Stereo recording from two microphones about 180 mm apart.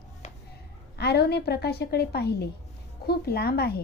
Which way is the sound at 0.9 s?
65° left (ahead or behind).